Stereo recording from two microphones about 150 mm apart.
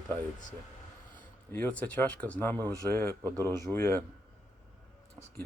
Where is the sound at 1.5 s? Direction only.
10° left (ahead or behind).